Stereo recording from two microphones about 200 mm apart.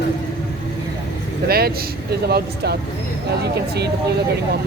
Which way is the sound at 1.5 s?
50° right (ahead or behind).